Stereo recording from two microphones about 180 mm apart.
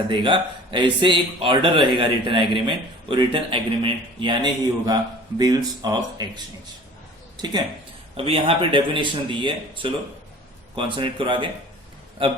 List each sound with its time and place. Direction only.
0.1 s speech: 25° right (ahead or behind)
8.1 s speech: 30° right (ahead or behind)